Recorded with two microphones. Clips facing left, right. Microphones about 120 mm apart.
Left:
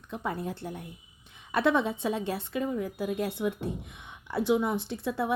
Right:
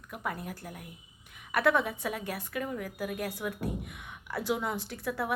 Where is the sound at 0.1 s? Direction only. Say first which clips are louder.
Left 4 dB; 25° left (ahead or behind).